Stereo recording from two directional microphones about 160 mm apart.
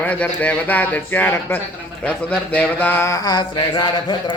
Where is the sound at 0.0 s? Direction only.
10° left (ahead or behind).